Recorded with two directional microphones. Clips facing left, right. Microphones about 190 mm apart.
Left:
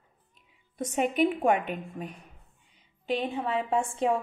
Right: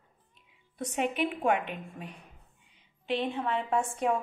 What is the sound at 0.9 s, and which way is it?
A woman's voice, 45° left (ahead or behind).